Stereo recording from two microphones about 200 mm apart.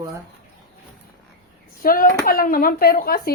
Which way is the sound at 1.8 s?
45° left (ahead or behind).